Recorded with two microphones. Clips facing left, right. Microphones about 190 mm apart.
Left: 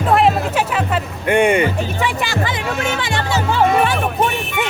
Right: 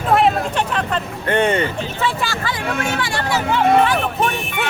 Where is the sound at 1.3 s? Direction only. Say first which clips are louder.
Left 3 dB; 10° left (ahead or behind).